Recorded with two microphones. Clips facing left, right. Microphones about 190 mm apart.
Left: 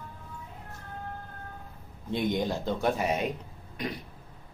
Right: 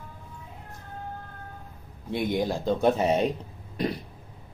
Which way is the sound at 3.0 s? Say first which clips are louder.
Right 5 dB; 30° right (ahead or behind).